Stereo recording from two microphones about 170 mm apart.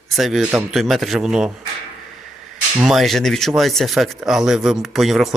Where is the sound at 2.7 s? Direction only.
Centre (ahead or behind).